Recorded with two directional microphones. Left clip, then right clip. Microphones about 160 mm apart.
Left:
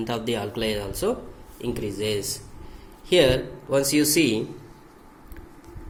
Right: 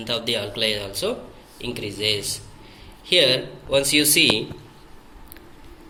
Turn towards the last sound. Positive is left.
turn(degrees=35)  # may be behind; listen again after turning